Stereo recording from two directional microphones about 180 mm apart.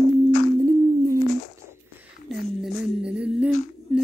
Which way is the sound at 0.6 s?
20° right (ahead or behind).